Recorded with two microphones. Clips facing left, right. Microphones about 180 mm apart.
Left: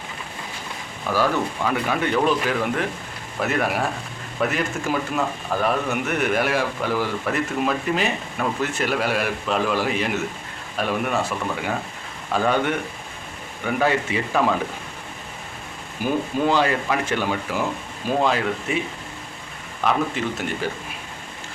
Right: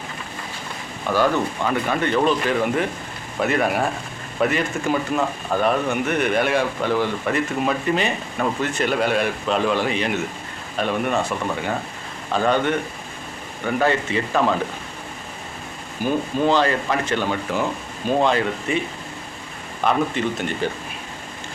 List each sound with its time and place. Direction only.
1.1 s speech: 5° left (ahead or behind)
13.7 s speech: 5° left (ahead or behind)
16.0 s speech: 10° left (ahead or behind)
19.8 s speech: 5° left (ahead or behind)